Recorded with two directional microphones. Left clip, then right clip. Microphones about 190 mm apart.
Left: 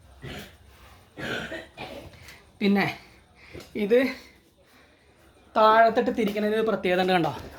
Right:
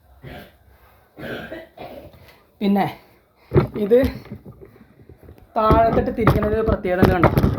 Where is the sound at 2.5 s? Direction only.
20° right (ahead or behind).